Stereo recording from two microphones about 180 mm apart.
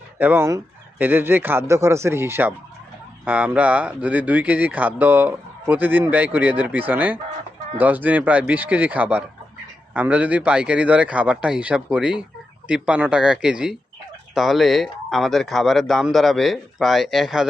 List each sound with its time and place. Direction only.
0.2 s speech: 10° right (ahead or behind)